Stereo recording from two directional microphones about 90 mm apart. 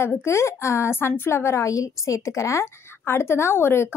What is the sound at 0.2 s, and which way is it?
A woman's voice, 30° left (ahead or behind).